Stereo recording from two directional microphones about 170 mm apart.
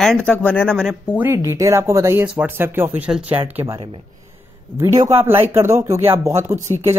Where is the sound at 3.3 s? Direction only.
35° right (ahead or behind).